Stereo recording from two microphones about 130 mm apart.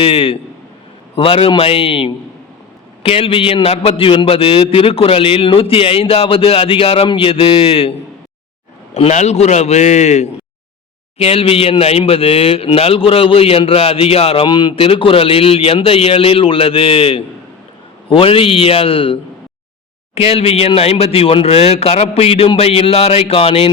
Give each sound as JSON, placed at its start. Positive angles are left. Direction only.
{"t": 0.0, "sound": "a man's voice", "side_deg": 45}
{"t": 9.0, "sound": "a man's voice", "side_deg": 55}
{"t": 11.2, "sound": "a man's voice", "side_deg": 50}